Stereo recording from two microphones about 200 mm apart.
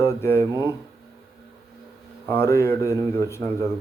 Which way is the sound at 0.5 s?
15° right (ahead or behind).